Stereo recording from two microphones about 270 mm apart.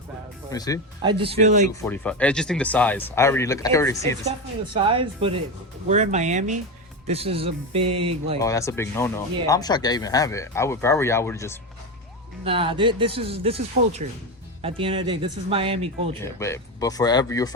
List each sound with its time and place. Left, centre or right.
0.5 s speech: centre
1.2 s speech: right
1.8 s speech: centre
4.3 s speech: centre
8.4 s speech: centre
12.5 s speech: centre
14.6 s speech: centre
16.2 s speech: centre